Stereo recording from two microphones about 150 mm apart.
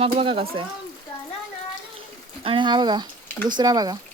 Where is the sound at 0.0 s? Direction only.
40° right (ahead or behind).